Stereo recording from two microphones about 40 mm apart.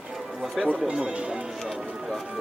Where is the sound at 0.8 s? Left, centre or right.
Right.